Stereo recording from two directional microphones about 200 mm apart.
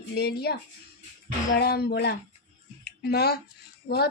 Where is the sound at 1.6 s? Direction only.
55° left (ahead or behind).